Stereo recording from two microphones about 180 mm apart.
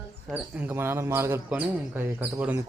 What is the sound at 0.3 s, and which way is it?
Speech, 10° right (ahead or behind).